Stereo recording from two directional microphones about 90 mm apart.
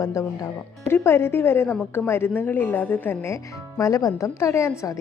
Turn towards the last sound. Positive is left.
turn(degrees=30)  # may be behind; listen again after turning